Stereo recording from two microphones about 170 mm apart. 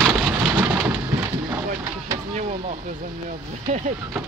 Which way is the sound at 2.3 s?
40° right (ahead or behind).